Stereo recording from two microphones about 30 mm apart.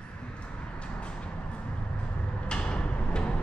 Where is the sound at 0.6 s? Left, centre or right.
Left.